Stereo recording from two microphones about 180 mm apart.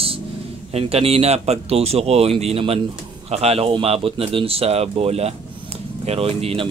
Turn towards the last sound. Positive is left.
turn(degrees=-30)  # may be behind; listen again after turning